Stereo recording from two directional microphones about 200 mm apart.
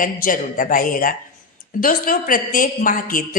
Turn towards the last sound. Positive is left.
turn(degrees=45)  # may be behind; listen again after turning